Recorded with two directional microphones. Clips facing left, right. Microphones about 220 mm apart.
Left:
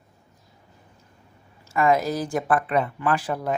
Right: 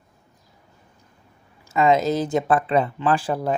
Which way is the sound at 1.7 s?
20° right (ahead or behind).